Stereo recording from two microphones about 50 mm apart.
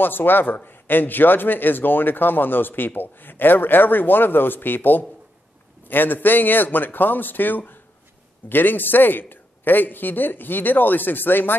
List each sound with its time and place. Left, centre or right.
0.0 s a man's voice: left